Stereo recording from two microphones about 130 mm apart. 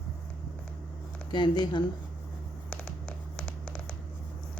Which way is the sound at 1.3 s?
35° left (ahead or behind).